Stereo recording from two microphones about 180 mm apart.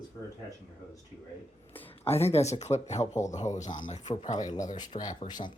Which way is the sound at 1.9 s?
35° left (ahead or behind).